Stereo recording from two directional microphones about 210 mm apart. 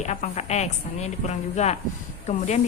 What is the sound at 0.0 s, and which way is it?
A woman's voice, 35° left (ahead or behind).